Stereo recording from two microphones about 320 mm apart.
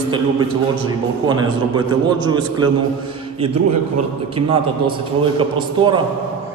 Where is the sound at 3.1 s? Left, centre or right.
Centre.